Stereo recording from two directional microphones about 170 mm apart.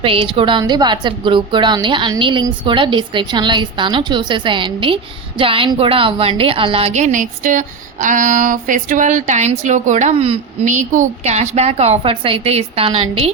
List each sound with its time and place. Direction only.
0.0 s a woman's voice: 30° right (ahead or behind)
10.7 s a woman's voice: 45° right (ahead or behind)